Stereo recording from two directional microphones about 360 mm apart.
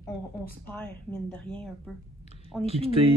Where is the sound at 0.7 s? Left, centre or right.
Centre.